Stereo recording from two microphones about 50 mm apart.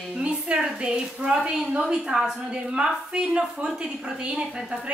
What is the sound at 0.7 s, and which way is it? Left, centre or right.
A woman's voice, centre.